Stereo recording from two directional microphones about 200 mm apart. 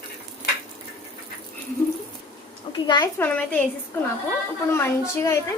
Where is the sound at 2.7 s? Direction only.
25° left (ahead or behind).